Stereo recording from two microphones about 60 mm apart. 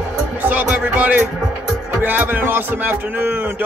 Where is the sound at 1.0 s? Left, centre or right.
Right.